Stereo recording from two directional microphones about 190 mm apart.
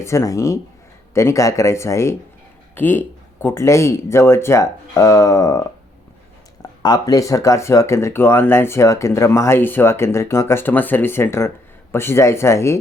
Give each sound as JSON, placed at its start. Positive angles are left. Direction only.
{"t": 0.0, "sound": "speech", "side_deg": 15}